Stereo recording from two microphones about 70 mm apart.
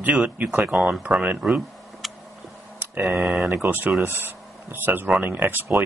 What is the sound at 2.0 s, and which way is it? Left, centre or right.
Tick, centre.